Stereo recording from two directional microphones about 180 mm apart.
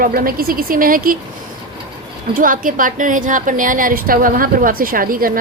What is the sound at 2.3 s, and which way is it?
A woman's voice, 50° right (ahead or behind).